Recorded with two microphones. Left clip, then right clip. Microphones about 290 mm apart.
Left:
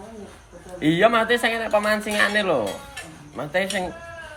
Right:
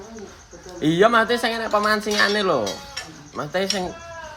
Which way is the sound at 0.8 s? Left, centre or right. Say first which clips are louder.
Right 1 dB; centre.